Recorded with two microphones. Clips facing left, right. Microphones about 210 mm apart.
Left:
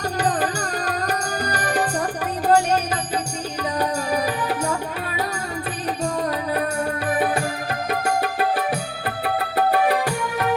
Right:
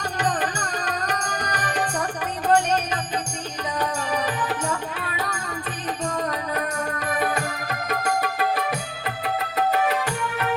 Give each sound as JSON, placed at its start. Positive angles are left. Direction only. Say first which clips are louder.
{"t": 0.3, "sound": "music", "louder": "left 3 dB", "side_deg": 35}
{"t": 7.1, "sound": "music", "louder": "left 3 dB", "side_deg": 30}